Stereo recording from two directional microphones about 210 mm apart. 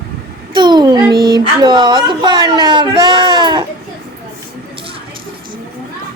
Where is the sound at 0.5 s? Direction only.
20° right (ahead or behind).